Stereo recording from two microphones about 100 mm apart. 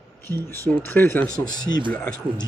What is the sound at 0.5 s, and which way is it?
Speech, 20° left (ahead or behind).